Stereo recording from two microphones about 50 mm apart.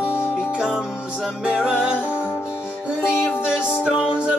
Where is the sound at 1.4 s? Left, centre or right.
Centre.